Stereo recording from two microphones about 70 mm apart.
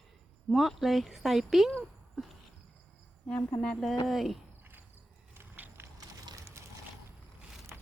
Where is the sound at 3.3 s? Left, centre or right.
Left.